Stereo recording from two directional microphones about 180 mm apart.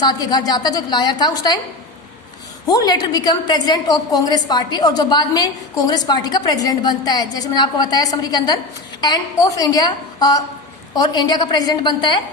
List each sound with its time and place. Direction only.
0.0 s a woman's voice: 20° left (ahead or behind)
2.6 s a woman's voice: 20° left (ahead or behind)